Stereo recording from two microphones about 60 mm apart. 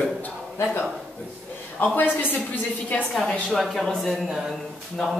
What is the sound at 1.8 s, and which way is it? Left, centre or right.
A man's voice, left.